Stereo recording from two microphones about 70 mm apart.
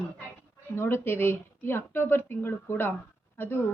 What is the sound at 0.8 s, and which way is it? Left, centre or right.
A woman's voice, left.